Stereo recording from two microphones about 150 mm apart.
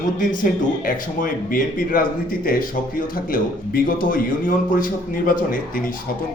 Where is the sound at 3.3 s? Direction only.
70° left (ahead or behind).